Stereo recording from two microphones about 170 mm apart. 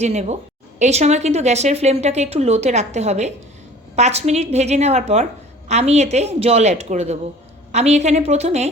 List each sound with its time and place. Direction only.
0.0 s speech: 40° right (ahead or behind)